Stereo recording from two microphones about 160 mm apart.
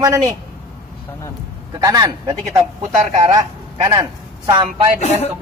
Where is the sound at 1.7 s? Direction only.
20° right (ahead or behind).